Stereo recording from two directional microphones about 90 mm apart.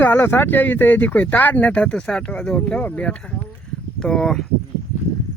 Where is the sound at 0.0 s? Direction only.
20° left (ahead or behind); by 4.4 s 5° left (ahead or behind).